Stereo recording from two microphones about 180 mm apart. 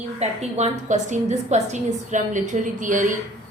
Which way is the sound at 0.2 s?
35° right (ahead or behind).